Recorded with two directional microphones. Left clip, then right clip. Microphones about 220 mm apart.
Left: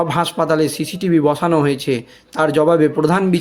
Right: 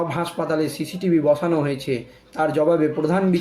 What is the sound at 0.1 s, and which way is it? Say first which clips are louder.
Speech: left 7 dB; 45° left (ahead or behind).